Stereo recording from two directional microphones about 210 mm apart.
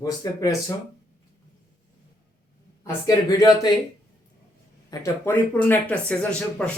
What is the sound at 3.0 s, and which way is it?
Speech, 20° left (ahead or behind).